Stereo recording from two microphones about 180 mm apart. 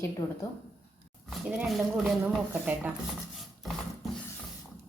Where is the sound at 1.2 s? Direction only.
Centre (ahead or behind).